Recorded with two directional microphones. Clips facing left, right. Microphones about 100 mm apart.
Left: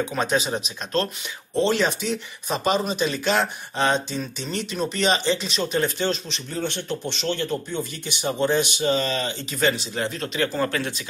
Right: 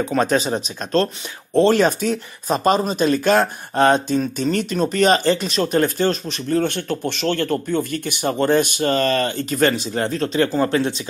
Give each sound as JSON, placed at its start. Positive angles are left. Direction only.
{"t": 0.0, "sound": "speech", "side_deg": -40}
{"t": 1.6, "sound": "speech", "side_deg": -45}